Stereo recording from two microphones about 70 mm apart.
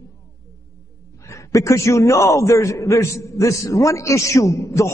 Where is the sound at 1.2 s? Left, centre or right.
Left.